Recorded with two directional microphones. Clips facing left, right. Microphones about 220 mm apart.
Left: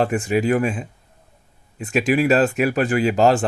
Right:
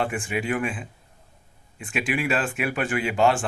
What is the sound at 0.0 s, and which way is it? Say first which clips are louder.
Speech: left 8 dB; 40° left (ahead or behind).